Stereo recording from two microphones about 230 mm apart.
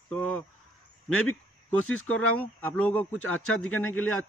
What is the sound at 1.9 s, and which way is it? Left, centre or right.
Speech, left.